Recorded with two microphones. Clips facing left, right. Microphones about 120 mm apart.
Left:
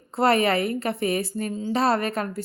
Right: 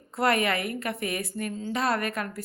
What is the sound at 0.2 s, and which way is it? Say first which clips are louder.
A woman's voice: left 5 dB; 30° left (ahead or behind).